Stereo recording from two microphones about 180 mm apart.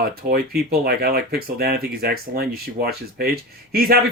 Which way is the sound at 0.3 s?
60° right (ahead or behind).